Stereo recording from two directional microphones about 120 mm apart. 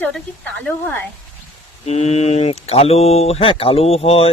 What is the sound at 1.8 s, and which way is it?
Speech, 65° left (ahead or behind).